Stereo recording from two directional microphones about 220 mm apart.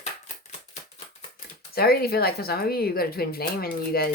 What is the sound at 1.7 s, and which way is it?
Speech, 45° left (ahead or behind).